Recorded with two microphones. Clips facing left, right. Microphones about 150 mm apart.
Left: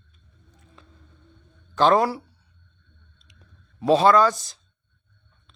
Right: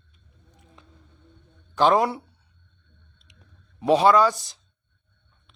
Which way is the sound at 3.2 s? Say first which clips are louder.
Even; 20° right (ahead or behind).